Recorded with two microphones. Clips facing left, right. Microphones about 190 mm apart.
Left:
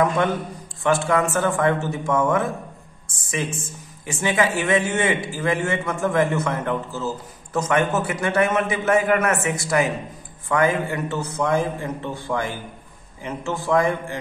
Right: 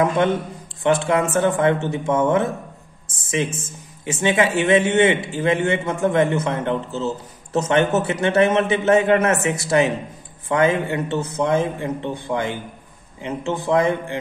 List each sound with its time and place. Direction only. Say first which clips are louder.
0.0 s a man's voice: right 2 dB; 20° right (ahead or behind)
4.0 s a man's voice: right 3 dB; 25° right (ahead or behind)